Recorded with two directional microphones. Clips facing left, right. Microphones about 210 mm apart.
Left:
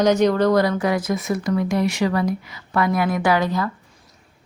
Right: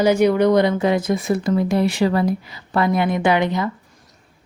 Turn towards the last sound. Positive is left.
turn(degrees=-20)  # may be behind; listen again after turning